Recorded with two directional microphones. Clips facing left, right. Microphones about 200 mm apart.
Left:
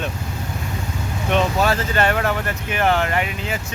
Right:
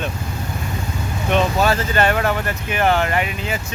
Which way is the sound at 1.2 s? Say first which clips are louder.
Right 1 dB; 5° right (ahead or behind).